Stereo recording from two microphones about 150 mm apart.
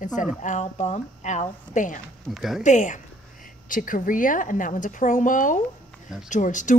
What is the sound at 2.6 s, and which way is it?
A woman's voice, 55° left (ahead or behind).